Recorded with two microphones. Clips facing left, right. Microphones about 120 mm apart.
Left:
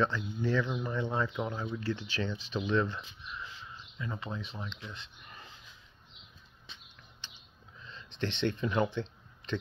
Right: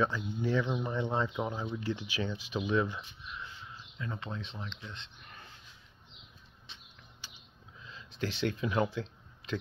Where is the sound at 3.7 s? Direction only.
Centre (ahead or behind).